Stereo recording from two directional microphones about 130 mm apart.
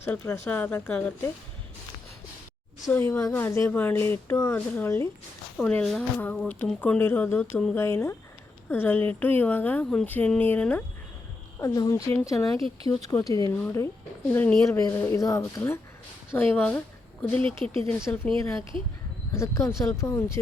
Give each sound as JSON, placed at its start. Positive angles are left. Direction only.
{"t": 0.0, "sound": "speech", "side_deg": 20}
{"t": 2.9, "sound": "speech", "side_deg": 20}
{"t": 5.5, "sound": "speech", "side_deg": 5}
{"t": 11.6, "sound": "speech", "side_deg": 25}
{"t": 12.6, "sound": "speech", "side_deg": -45}
{"t": 13.1, "sound": "speech", "side_deg": 25}
{"t": 19.3, "sound": "speech", "side_deg": 20}